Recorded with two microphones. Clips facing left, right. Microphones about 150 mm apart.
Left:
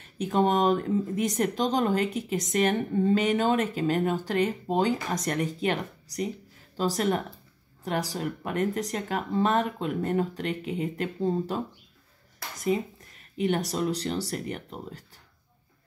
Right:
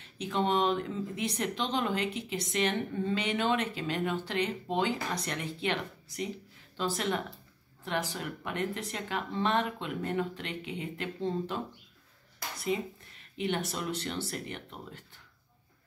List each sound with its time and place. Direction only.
0.0 s a woman's voice: 45° left (ahead or behind)